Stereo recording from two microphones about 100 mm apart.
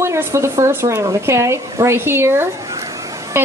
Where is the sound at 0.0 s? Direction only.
25° right (ahead or behind).